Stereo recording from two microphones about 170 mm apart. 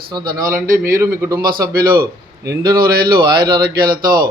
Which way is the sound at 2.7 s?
65° right (ahead or behind).